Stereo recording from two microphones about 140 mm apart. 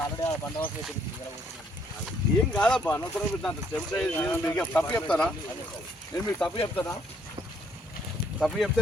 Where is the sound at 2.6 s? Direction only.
5° left (ahead or behind).